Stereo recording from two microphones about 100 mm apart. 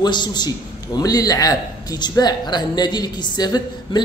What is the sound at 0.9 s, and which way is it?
A man's voice, 35° left (ahead or behind).